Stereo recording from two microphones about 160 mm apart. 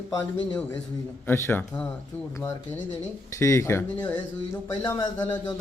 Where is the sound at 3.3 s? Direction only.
20° left (ahead or behind).